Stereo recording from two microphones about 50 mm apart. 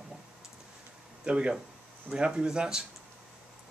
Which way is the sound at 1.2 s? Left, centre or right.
Right.